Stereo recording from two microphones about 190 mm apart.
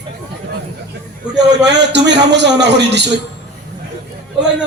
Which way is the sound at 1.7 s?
65° right (ahead or behind).